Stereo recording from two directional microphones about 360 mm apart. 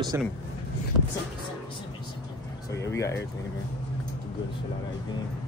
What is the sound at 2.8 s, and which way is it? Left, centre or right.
Speech, centre.